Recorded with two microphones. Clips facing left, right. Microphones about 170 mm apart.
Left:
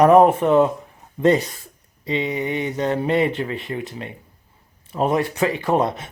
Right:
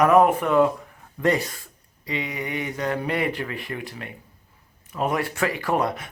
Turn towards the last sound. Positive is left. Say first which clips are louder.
# left 4 dB
turn(degrees=25)  # may be behind; listen again after turning